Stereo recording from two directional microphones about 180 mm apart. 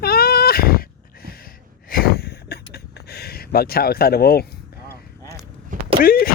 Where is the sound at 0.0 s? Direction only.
60° left (ahead or behind).